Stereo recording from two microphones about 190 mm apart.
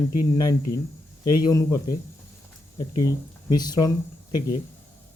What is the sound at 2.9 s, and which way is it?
Speech, 20° left (ahead or behind).